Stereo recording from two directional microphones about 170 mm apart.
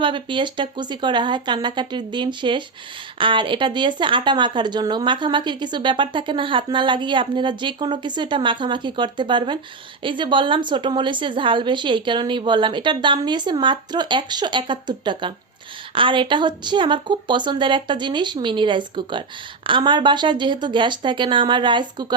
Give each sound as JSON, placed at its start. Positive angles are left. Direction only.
{"t": 0.0, "sound": "speech", "side_deg": -30}